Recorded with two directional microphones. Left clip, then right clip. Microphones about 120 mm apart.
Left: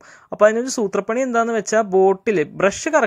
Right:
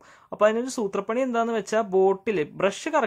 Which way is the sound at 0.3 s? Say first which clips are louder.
Left 6 dB; 35° left (ahead or behind).